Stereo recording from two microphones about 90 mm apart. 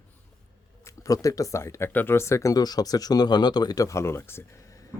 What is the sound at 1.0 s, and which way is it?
Speech, 40° left (ahead or behind).